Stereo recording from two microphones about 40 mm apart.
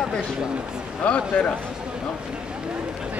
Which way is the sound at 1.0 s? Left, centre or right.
Left.